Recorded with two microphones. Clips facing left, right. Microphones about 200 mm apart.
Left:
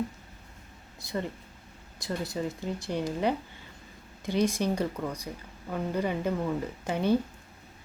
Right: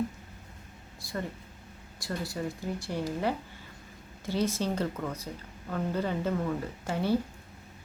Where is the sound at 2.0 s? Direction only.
20° left (ahead or behind).